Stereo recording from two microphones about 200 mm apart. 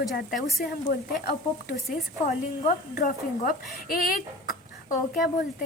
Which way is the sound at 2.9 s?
40° left (ahead or behind).